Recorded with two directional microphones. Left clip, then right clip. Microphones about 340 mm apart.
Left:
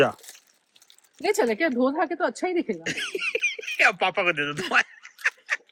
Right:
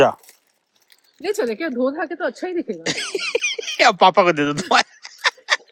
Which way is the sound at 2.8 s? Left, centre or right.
Centre.